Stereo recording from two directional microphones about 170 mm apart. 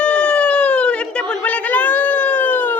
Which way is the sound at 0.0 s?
5° left (ahead or behind).